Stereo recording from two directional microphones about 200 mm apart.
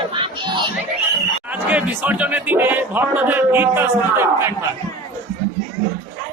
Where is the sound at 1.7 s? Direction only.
10° right (ahead or behind).